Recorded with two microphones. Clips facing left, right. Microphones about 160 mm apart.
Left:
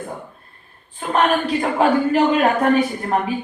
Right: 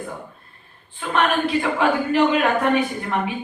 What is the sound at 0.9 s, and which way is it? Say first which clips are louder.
Speech: left 3 dB; 40° left (ahead or behind).